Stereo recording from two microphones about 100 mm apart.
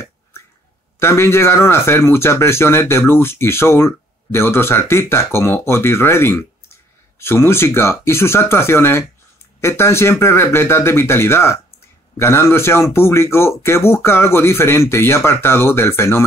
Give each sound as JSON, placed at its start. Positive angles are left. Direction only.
{"t": 0.9, "sound": "speech", "side_deg": 25}